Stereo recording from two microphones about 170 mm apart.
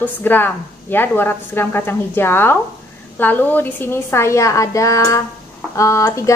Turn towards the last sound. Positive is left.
turn(degrees=20)  # may be behind; listen again after turning